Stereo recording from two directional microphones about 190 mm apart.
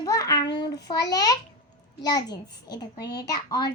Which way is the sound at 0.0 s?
20° left (ahead or behind).